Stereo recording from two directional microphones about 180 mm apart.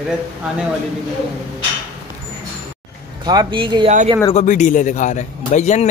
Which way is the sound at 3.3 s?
25° right (ahead or behind).